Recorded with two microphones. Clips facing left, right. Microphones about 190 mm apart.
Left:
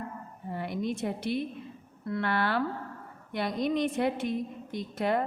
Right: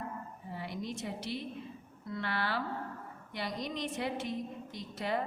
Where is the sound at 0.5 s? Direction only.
55° left (ahead or behind).